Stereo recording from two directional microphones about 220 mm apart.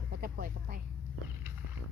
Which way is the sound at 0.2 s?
40° right (ahead or behind).